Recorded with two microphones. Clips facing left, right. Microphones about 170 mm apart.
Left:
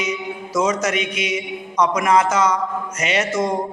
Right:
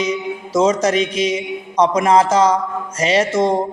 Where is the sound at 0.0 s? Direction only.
30° right (ahead or behind).